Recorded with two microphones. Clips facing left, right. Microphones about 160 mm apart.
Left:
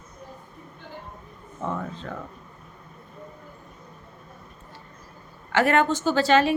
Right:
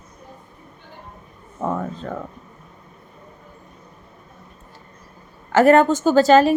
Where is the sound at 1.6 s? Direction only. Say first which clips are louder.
Right 6 dB; 45° right (ahead or behind).